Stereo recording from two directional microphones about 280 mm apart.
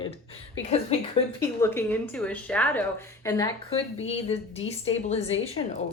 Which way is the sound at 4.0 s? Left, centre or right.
Left.